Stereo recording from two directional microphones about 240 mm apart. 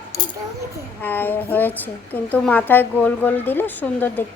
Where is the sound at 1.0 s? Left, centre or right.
Centre.